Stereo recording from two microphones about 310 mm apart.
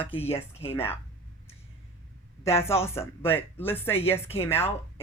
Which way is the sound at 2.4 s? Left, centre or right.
Centre.